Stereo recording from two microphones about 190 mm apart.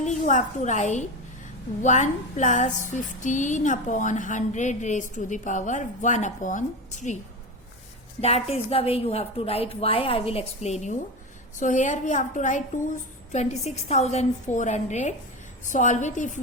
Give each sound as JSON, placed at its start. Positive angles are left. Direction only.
{"t": 0.0, "sound": "a woman's voice", "side_deg": 40}
{"t": 1.8, "sound": "music", "side_deg": 40}
{"t": 8.2, "sound": "music", "side_deg": 30}